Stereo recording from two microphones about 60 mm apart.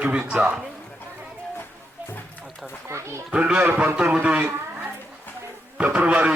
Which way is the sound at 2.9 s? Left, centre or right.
Right.